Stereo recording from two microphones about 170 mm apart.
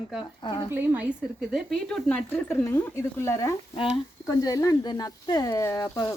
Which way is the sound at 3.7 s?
30° left (ahead or behind).